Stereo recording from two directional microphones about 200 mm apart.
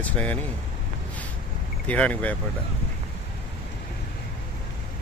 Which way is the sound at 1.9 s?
5° left (ahead or behind).